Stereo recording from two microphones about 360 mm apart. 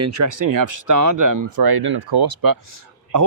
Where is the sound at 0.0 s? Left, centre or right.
Right.